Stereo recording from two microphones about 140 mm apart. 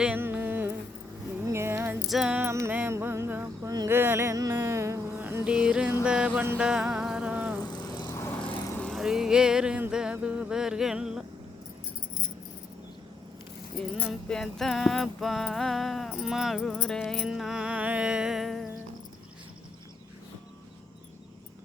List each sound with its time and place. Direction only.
0.0 s music: 10° right (ahead or behind)
1.5 s a sound: 20° right (ahead or behind)
2.0 s music: 5° right (ahead or behind)
2.4 s a sound: 15° right (ahead or behind)
6.0 s music: 5° right (ahead or behind)
7.6 s vehicle: 30° left (ahead or behind)
8.1 s vehicle: 20° left (ahead or behind)
8.4 s vehicle: 5° left (ahead or behind)
13.7 s a sound: 5° left (ahead or behind)